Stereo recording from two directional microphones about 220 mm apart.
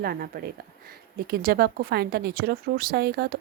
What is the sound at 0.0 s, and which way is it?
Speech, 45° right (ahead or behind).